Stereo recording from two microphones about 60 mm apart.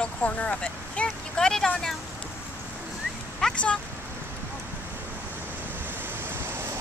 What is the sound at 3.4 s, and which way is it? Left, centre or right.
Speech, centre.